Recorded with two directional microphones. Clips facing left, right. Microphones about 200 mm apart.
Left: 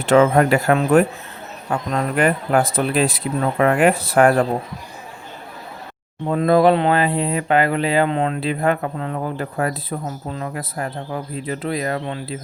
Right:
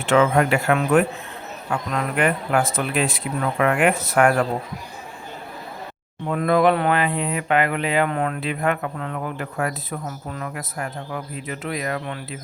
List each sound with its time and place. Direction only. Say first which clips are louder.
0.0 s speech: left 4 dB; 40° left (ahead or behind)
6.2 s speech: left 3 dB; 30° left (ahead or behind)